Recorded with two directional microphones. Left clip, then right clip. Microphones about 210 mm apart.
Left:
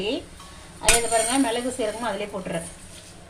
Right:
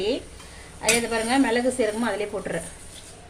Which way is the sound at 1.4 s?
20° right (ahead or behind).